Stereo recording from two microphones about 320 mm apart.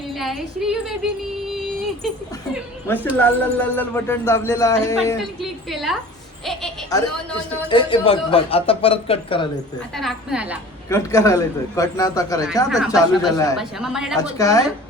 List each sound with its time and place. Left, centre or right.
0.2 s a woman's voice: centre
1.5 s music: centre
2.8 s a woman's voice: centre
6.4 s a sound: centre
6.9 s a man's voice: centre
9.9 s a woman's voice: centre
10.8 s a man's voice: centre
13.6 s a woman's voice: centre
14.2 s a man's voice: centre